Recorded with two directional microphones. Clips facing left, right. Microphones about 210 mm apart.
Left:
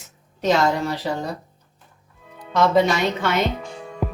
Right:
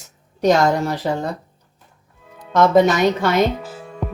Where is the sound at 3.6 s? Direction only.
Centre (ahead or behind).